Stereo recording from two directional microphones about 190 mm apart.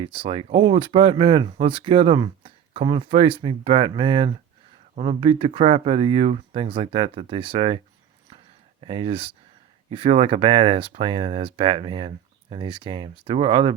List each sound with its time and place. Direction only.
0.0 s speech: 25° right (ahead or behind)
8.8 s speech: 30° right (ahead or behind)